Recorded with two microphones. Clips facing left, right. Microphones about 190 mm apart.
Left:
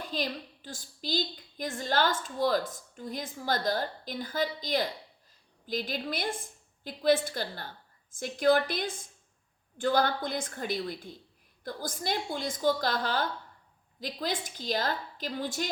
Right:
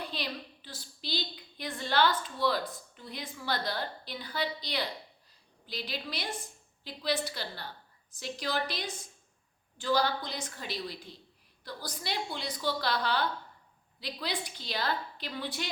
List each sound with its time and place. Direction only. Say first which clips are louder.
0.0 s a woman's voice: left 4 dB; 45° left (ahead or behind)